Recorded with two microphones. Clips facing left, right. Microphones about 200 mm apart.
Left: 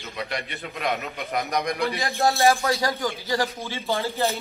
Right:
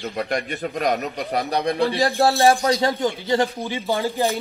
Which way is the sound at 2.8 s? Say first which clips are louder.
Right 5 dB; 25° right (ahead or behind).